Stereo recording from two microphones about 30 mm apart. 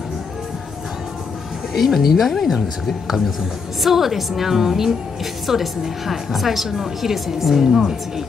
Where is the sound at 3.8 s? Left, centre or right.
Centre.